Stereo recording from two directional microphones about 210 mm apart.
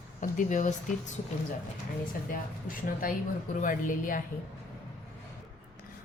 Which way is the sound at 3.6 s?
40° left (ahead or behind).